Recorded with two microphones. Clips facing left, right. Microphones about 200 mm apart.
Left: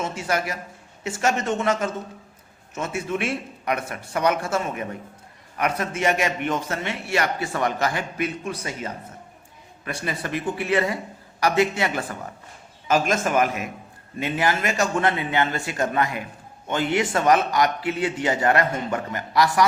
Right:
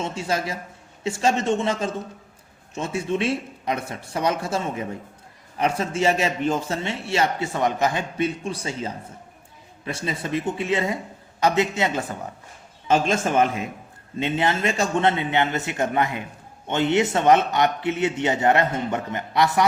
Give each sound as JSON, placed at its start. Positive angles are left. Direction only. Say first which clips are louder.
{"t": 0.3, "sound": "a man's voice", "louder": "even", "side_deg": -25}